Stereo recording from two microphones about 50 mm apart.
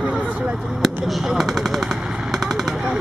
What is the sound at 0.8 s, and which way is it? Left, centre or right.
Machine gun, centre.